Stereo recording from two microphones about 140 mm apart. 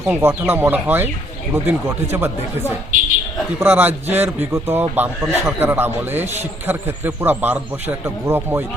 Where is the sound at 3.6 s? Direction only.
15° right (ahead or behind).